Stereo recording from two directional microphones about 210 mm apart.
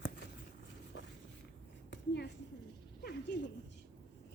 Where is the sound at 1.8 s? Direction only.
50° left (ahead or behind).